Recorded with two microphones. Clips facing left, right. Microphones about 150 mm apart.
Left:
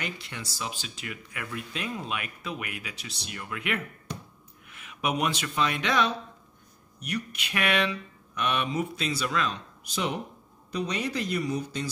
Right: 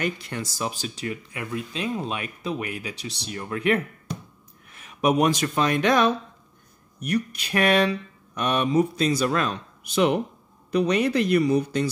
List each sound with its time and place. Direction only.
0.0 s speech: 45° right (ahead or behind); by 11.9 s 65° right (ahead or behind)